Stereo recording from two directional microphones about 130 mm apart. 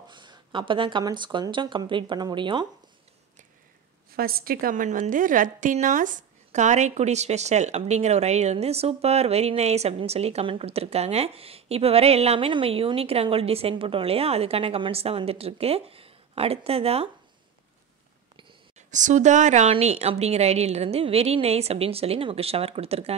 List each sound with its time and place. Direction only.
0.1 s speech: 35° right (ahead or behind)
4.6 s speech: 90° right; by 17.1 s 50° right (ahead or behind)
18.8 s speech: 70° right (ahead or behind)
19.7 s speech: 55° right (ahead or behind)